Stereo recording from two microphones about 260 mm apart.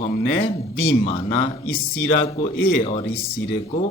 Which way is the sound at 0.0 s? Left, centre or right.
Left.